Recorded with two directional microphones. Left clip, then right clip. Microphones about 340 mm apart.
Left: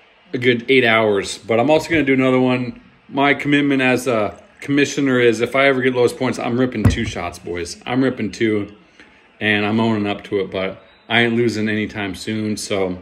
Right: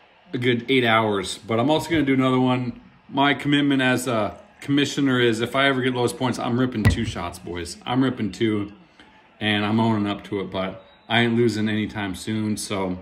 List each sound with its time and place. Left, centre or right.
0.3 s a man's voice: centre
3.2 s a man's voice: left
3.6 s speech: centre
7.5 s a man's voice: left
7.8 s speech: centre